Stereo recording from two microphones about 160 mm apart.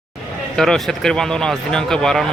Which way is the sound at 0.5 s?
5° left (ahead or behind).